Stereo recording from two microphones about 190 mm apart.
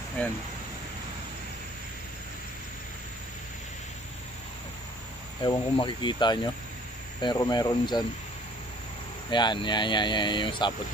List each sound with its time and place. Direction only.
5.4 s speech: 25° left (ahead or behind)
9.3 s speech: 25° left (ahead or behind)